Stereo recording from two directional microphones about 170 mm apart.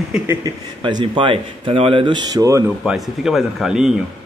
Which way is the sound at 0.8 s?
30° right (ahead or behind).